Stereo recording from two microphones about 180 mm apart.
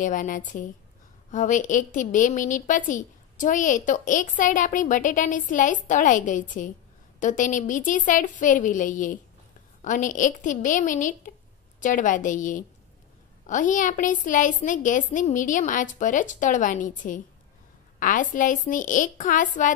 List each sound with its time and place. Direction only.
0.0 s a woman's voice: 45° left (ahead or behind)